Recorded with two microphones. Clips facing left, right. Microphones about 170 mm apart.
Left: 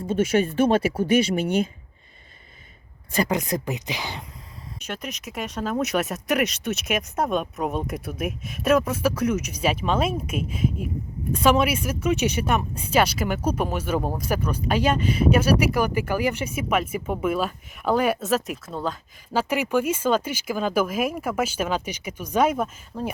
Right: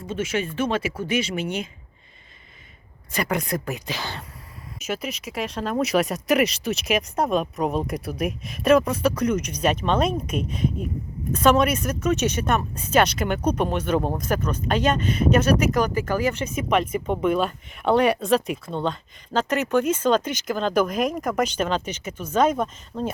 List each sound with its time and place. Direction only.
0.4 s speech: 35° left (ahead or behind)
3.2 s speech: 20° left (ahead or behind)
4.8 s speech: 5° right (ahead or behind)